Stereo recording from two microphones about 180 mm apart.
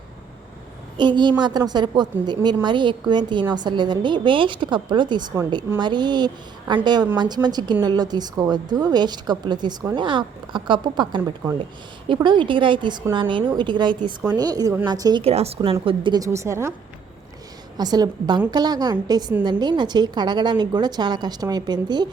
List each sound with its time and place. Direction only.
0.9 s speech: 25° right (ahead or behind)
15.2 s a woman's voice: 35° right (ahead or behind); by 16.7 s 15° right (ahead or behind)
17.7 s speech: 20° right (ahead or behind)